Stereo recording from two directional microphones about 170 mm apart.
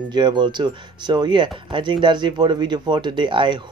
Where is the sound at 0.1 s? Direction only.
25° right (ahead or behind).